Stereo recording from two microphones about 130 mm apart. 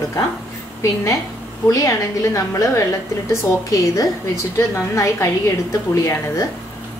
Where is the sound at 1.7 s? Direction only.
25° left (ahead or behind).